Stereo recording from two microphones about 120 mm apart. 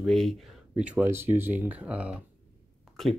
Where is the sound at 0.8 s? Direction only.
10° right (ahead or behind).